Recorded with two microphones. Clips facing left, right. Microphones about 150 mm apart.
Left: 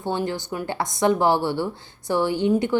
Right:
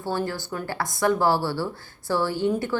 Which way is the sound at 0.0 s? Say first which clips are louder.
Left 2 dB; 20° left (ahead or behind).